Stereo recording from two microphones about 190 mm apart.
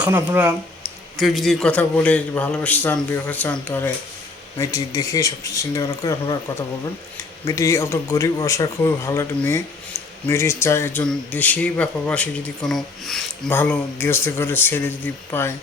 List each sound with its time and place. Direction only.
0.0 s speech: 10° right (ahead or behind); by 6.3 s 15° left (ahead or behind)
7.4 s speech: 15° left (ahead or behind)